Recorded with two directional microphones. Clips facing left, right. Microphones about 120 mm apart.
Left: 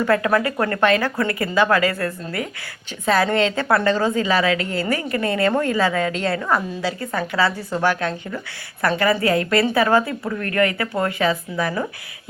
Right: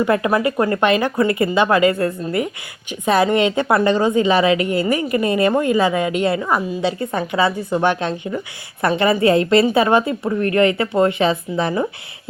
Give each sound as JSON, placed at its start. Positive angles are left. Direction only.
{"t": 0.0, "sound": "a woman's voice", "side_deg": -15}